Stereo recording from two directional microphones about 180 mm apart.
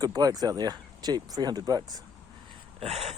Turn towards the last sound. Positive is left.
turn(degrees=-35)  # may be behind; listen again after turning